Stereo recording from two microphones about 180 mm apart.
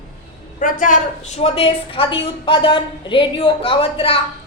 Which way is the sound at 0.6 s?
45° left (ahead or behind).